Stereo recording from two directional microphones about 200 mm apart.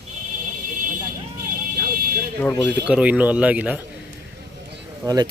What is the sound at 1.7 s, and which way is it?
Vehicle, 45° right (ahead or behind).